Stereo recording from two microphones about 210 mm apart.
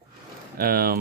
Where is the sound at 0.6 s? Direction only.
45° right (ahead or behind).